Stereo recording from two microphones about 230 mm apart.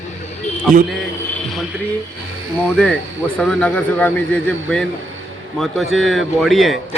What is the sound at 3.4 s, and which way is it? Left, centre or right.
A man's voice, centre.